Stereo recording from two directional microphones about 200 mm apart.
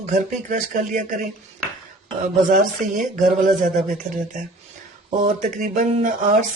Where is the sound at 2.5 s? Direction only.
40° right (ahead or behind).